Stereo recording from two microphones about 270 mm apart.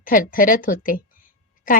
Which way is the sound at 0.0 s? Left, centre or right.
Left.